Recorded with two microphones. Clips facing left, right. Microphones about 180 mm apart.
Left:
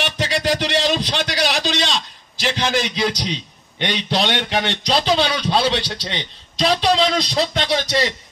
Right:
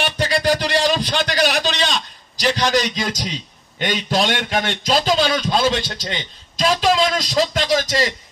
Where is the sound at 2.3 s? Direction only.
40° right (ahead or behind).